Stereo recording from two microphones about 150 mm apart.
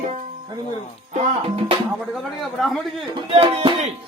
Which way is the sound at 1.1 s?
40° right (ahead or behind).